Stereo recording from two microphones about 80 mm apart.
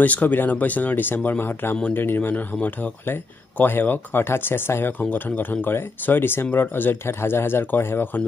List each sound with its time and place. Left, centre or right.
0.0 s speech: centre